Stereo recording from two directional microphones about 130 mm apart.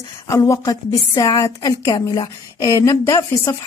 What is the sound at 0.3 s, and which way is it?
A woman's voice, 25° left (ahead or behind).